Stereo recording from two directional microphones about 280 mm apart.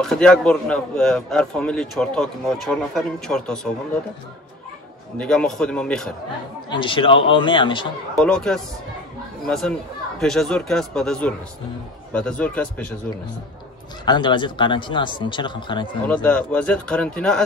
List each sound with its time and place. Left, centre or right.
0.0 s a man's voice: centre
5.1 s a man's voice: centre
6.7 s speech: centre
8.2 s a man's voice: centre
14.0 s speech: centre
16.1 s a man's voice: centre